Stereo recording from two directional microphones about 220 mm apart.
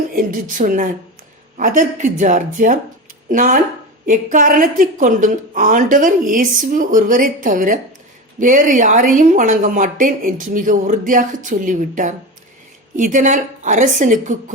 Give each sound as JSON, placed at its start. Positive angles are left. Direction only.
{"t": 0.1, "sound": "speech", "side_deg": -40}